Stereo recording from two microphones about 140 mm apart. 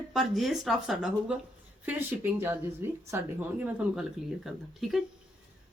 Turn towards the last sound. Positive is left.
turn(degrees=0)  # may be behind; listen again after turning